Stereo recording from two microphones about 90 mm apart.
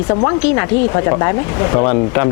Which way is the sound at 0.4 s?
25° left (ahead or behind).